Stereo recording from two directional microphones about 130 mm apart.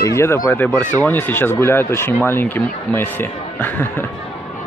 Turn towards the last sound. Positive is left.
turn(degrees=15)  # may be behind; listen again after turning